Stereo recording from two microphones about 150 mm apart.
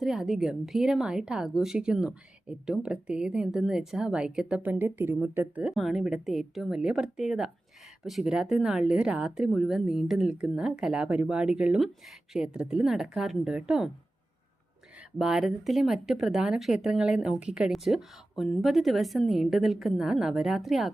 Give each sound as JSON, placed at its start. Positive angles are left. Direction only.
{"t": 0.0, "sound": "a woman's voice", "side_deg": -5}
{"t": 5.7, "sound": "a woman's voice", "side_deg": 0}
{"t": 15.2, "sound": "a woman's voice", "side_deg": 0}